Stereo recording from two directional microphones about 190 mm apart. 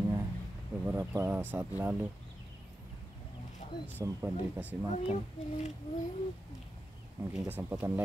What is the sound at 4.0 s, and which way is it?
Speech, 15° right (ahead or behind).